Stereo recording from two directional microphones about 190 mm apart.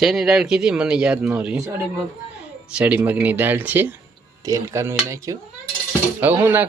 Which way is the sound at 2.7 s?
10° right (ahead or behind).